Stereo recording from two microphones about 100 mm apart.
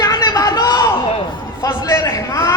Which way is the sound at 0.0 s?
40° left (ahead or behind).